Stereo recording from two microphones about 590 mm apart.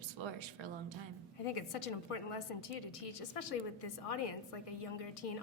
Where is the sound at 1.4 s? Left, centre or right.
Left.